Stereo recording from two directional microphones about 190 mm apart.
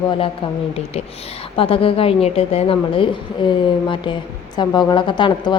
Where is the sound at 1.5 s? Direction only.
30° left (ahead or behind).